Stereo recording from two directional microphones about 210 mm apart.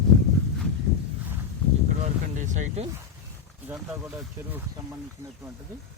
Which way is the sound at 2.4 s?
35° right (ahead or behind).